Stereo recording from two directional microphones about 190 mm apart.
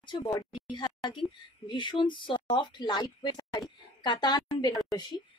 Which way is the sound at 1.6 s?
25° left (ahead or behind).